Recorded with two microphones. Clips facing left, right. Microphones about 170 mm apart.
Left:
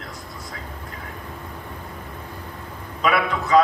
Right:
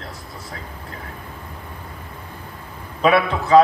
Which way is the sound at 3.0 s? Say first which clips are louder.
Right 4 dB; 30° right (ahead or behind).